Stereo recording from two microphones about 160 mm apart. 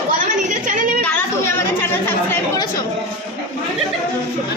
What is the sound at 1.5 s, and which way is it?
Chatter, 15° left (ahead or behind).